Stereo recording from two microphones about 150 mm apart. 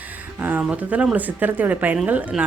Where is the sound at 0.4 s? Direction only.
10° right (ahead or behind).